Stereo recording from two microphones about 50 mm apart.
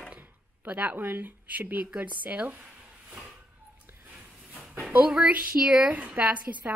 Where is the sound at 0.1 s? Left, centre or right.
Right.